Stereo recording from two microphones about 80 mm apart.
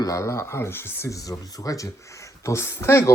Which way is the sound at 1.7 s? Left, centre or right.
Left.